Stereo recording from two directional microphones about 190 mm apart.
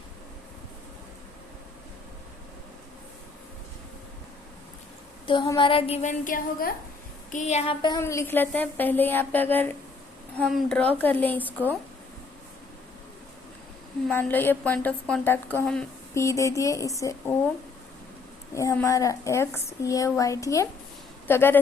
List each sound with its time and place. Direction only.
5.2 s a woman's voice: 25° left (ahead or behind); by 6.7 s 50° left (ahead or behind)
7.3 s a sound: 35° left (ahead or behind)
7.8 s a child's voice: 20° left (ahead or behind)
14.1 s speech: 10° left (ahead or behind)
16.2 s speech: 15° left (ahead or behind)
18.5 s speech: 15° left (ahead or behind)